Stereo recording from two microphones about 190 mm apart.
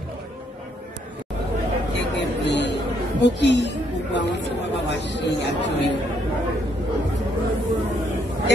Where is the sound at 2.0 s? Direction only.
65° left (ahead or behind).